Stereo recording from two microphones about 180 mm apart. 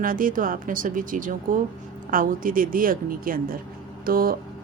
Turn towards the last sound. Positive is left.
turn(degrees=-55)  # may be behind; listen again after turning